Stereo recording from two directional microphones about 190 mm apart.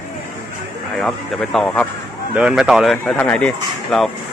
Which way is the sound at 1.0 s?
Centre (ahead or behind).